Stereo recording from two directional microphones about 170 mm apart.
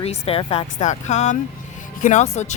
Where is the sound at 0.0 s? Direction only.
35° left (ahead or behind).